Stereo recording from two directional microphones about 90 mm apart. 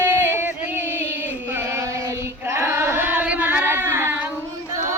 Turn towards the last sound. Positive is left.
turn(degrees=-25)  # may be behind; listen again after turning